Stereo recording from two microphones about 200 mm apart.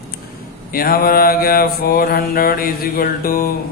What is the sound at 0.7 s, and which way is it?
Mantra, 45° left (ahead or behind).